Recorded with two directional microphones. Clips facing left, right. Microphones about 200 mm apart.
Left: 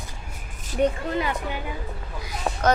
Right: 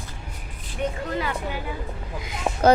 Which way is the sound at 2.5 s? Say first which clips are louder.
Right 1 dB; 15° right (ahead or behind).